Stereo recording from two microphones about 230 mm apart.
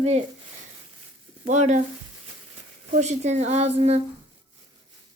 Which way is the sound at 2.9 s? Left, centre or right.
Right.